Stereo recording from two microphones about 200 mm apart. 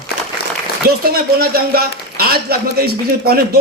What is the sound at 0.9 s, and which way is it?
A man's voice, 50° right (ahead or behind).